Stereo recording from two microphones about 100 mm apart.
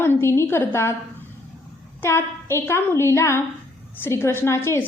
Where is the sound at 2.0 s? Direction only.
25° left (ahead or behind).